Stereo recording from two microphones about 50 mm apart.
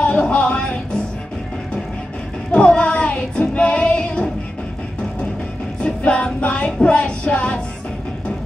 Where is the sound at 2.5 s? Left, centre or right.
Centre.